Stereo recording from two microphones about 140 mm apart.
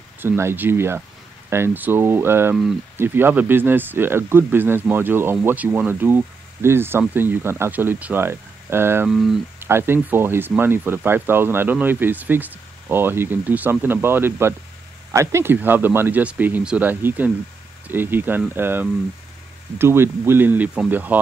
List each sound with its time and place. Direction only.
0.2 s speech: 15° right (ahead or behind)